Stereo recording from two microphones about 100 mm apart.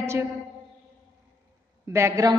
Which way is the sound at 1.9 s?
30° right (ahead or behind).